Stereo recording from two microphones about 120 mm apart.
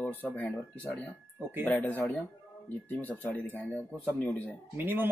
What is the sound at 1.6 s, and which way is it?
Speech, 15° left (ahead or behind).